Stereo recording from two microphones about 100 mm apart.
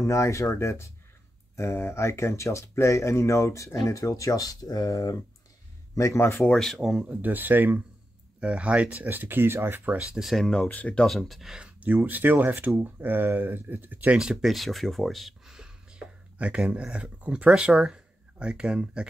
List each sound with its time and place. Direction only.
0.0 s speech: 30° left (ahead or behind)
6.4 s speech: 5° left (ahead or behind); by 9.9 s 20° right (ahead or behind)
10.1 s speech: centre (ahead or behind)